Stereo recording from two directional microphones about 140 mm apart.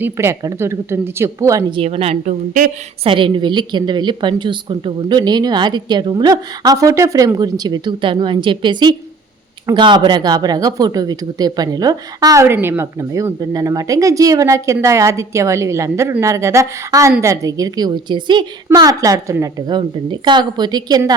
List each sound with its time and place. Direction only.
0.0 s speech: 20° right (ahead or behind)
1.7 s a woman's voice: 45° right (ahead or behind)